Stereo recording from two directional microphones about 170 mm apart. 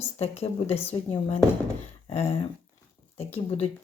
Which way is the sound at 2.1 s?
40° left (ahead or behind).